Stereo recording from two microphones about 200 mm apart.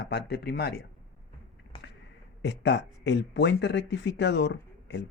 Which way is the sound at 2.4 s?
60° left (ahead or behind).